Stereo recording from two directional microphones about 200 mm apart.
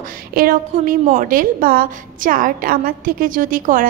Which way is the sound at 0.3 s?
45° right (ahead or behind).